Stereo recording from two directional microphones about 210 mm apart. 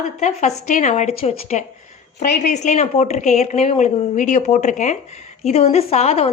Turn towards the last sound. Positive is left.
turn(degrees=30)  # may be behind; listen again after turning